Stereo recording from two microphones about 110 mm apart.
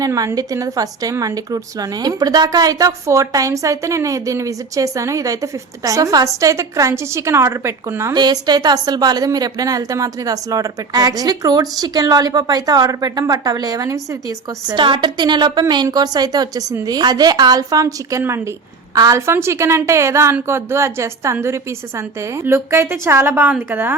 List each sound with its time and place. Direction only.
0.0 s a woman's voice: 35° right (ahead or behind)
8.1 s a woman's voice: 40° right (ahead or behind)
14.8 s a woman's voice: 50° right (ahead or behind); by 18.5 s 20° right (ahead or behind)
18.9 s a woman's voice: 30° right (ahead or behind)